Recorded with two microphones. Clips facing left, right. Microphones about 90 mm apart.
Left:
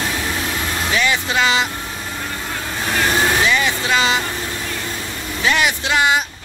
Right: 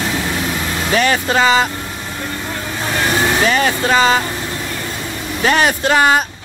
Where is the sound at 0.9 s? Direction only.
40° right (ahead or behind).